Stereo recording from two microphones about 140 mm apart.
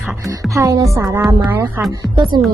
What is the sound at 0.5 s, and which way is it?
Speech, 20° right (ahead or behind).